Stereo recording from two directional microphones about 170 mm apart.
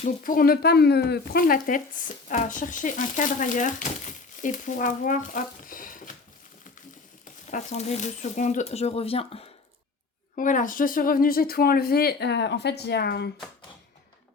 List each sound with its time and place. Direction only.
0.3 s speech: 60° left (ahead or behind)
7.5 s speech: 40° left (ahead or behind)
10.3 s speech: 50° left (ahead or behind); by 13.3 s 70° left (ahead or behind)